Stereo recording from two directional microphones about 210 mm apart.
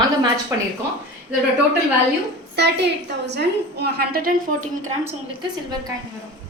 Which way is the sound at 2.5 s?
55° right (ahead or behind).